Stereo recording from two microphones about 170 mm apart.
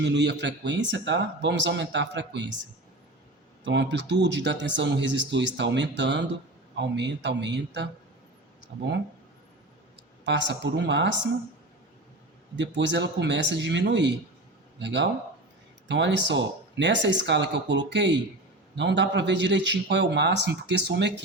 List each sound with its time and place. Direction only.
0.0 s speech: 90° right
3.6 s speech: 90° right
8.7 s speech: 75° right (ahead or behind)
10.2 s speech: 90° right
12.5 s speech: 90° right